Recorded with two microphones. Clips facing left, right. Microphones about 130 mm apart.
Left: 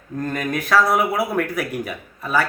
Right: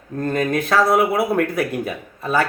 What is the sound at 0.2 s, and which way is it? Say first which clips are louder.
Speech: right 4 dB; 25° right (ahead or behind).